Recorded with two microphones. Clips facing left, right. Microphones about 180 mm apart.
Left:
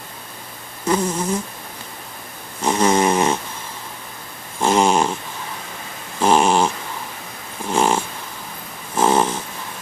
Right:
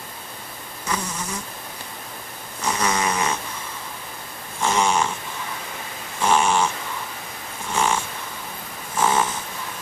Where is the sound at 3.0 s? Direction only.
50° left (ahead or behind).